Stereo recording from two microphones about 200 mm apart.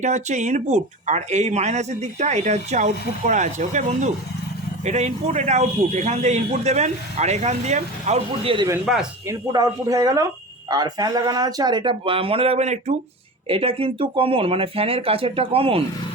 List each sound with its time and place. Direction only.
0.0 s speech: 35° right (ahead or behind)
8.8 s speech: 5° right (ahead or behind)
9.2 s speech: 15° right (ahead or behind)